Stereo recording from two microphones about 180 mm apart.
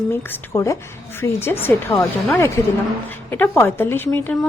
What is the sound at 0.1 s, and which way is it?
A woman's voice, 15° left (ahead or behind).